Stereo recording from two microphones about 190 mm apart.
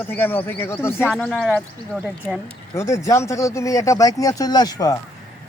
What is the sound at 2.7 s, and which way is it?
A man's voice, 15° left (ahead or behind).